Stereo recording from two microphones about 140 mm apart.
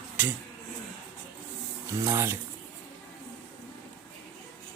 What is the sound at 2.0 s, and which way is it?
Speech, 20° right (ahead or behind).